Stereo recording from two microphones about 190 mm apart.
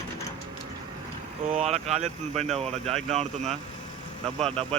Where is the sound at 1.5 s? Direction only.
35° right (ahead or behind).